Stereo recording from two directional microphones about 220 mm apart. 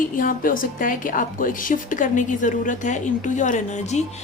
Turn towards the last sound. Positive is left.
turn(degrees=30)  # may be behind; listen again after turning